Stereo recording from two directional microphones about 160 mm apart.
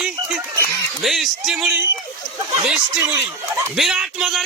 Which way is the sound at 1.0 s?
Centre (ahead or behind).